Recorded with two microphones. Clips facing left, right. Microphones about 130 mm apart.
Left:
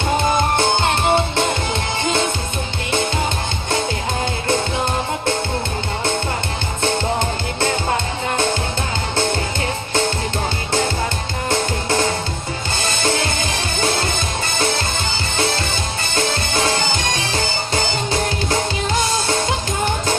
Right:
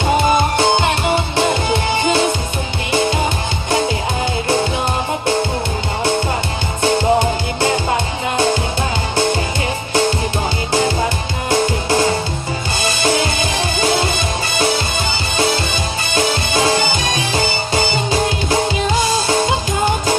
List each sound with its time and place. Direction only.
0.3 s music: 15° right (ahead or behind)
6.8 s music: 15° right (ahead or behind)
16.1 s music: 15° right (ahead or behind)